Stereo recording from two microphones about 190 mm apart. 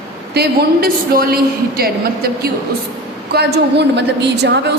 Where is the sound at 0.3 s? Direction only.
55° right (ahead or behind).